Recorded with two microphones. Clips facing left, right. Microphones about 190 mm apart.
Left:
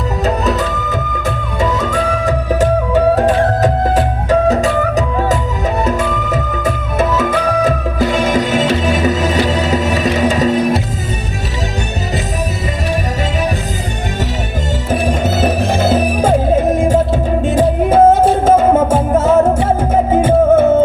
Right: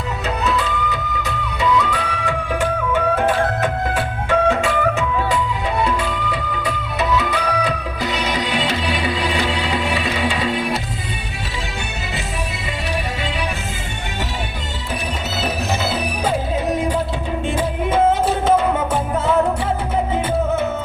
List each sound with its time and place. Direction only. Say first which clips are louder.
0.3 s music: left 4 dB; 40° left (ahead or behind)
14.8 s music: left 11 dB; 45° left (ahead or behind)